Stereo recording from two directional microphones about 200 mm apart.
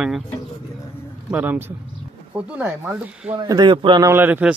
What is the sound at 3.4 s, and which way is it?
A man's voice, 20° right (ahead or behind).